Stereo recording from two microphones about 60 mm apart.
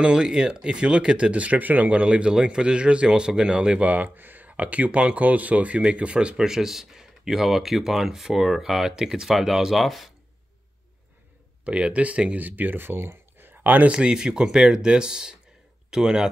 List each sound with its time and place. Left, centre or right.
0.0 s speech: centre
11.6 s speech: centre
13.9 s speech: centre